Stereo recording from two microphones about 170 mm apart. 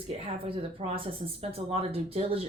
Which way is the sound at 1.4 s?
35° right (ahead or behind).